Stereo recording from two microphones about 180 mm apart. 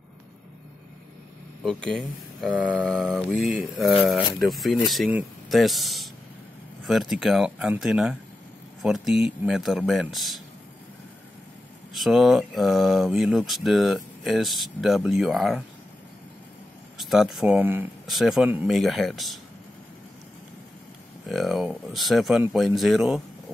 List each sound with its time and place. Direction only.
1.6 s speech: centre (ahead or behind)
11.9 s speech: centre (ahead or behind)
17.0 s speech: centre (ahead or behind)
21.3 s speech: centre (ahead or behind)